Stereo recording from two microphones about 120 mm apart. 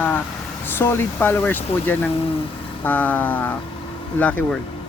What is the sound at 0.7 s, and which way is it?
Speech, 20° left (ahead or behind).